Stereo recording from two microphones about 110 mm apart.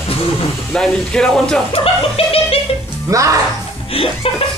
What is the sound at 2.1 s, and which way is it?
Music, 60° left (ahead or behind).